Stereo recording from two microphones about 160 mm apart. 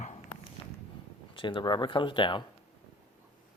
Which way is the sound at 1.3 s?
30° left (ahead or behind).